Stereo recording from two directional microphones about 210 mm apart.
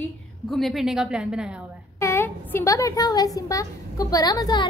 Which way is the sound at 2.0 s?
10° left (ahead or behind).